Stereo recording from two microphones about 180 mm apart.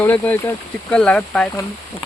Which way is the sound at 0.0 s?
10° left (ahead or behind).